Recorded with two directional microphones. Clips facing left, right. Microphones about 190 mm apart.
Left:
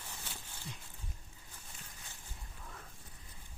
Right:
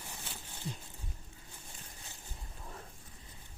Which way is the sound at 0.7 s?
30° right (ahead or behind).